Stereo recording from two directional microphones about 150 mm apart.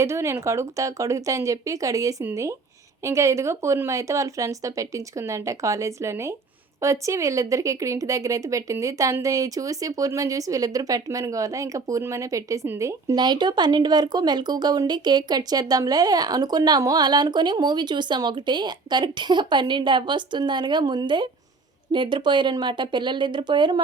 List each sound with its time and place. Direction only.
0.0 s speech: 20° right (ahead or behind)